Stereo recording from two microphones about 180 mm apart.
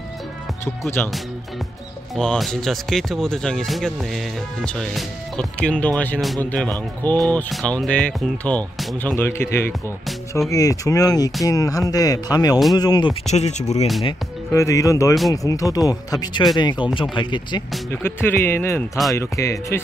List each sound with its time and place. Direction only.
0.8 s speech: 15° left (ahead or behind)
2.1 s speech: centre (ahead or behind); by 13.1 s 20° left (ahead or behind)
13.3 s speech: 40° left (ahead or behind)
14.5 s speech: 15° left (ahead or behind)
18.0 s speech: 10° left (ahead or behind)